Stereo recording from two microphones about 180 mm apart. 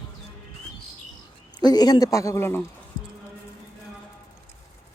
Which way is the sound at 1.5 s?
20° left (ahead or behind).